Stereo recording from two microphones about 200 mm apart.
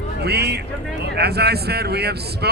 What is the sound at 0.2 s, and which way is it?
Speech, 55° right (ahead or behind).